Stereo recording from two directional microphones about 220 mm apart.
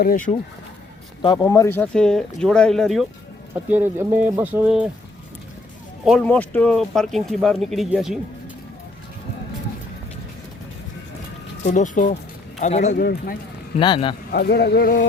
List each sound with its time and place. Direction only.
0.0 s speech: 40° left (ahead or behind)
1.2 s speech: 20° left (ahead or behind); by 4.9 s 5° right (ahead or behind)
6.1 s speech: 5° left (ahead or behind)
11.6 s a man's voice: 35° left (ahead or behind)
14.3 s speech: 45° left (ahead or behind)